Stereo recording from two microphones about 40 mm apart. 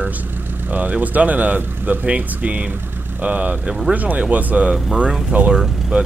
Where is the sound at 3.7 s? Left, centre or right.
Right.